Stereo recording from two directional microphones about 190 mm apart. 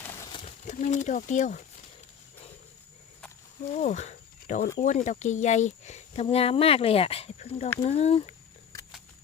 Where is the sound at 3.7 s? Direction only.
40° left (ahead or behind).